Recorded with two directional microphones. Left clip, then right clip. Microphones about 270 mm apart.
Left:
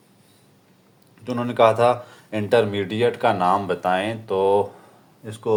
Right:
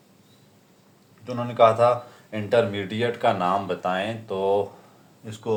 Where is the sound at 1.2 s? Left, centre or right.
Left.